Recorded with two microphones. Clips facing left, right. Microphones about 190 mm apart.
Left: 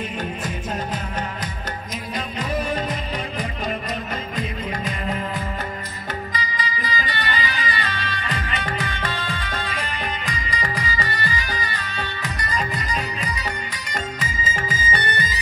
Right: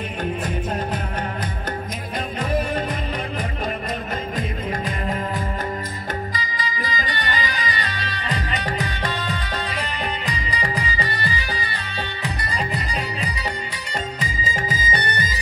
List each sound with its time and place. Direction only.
0.2 s music: 55° right (ahead or behind)
4.4 s music: 50° right (ahead or behind)
6.3 s music: 45° right (ahead or behind)